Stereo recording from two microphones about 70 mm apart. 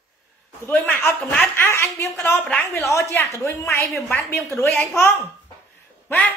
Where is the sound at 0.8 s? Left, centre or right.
Left.